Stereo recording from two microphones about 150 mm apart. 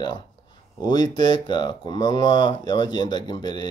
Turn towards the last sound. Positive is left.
turn(degrees=30)  # may be behind; listen again after turning